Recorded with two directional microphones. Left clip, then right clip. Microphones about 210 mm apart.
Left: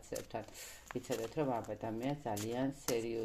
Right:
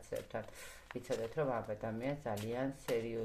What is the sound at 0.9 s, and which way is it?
Speech, 40° left (ahead or behind).